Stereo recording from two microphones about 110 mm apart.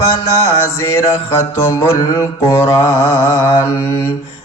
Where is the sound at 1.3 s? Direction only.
25° left (ahead or behind).